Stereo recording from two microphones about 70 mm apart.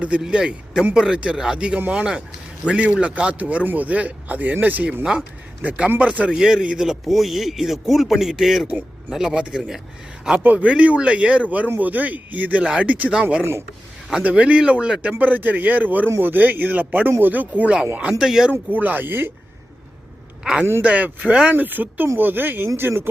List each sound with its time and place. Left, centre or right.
0.2 s a man's voice: centre
10.2 s a man's voice: right
15.2 s a man's voice: right
18.2 s speech: centre
18.5 s a man's voice: right
20.4 s a man's voice: centre
20.8 s a man's voice: centre
21.5 s a man's voice: right